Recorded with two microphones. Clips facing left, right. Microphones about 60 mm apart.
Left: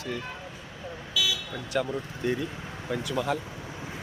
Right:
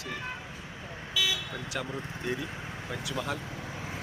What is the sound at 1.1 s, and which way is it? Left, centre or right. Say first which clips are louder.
Vehicle: left 1 dB; right.